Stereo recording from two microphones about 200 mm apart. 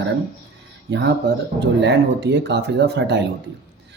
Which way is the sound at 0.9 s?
60° right (ahead or behind).